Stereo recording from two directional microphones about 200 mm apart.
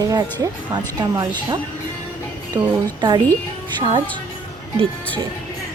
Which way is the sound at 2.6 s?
25° right (ahead or behind).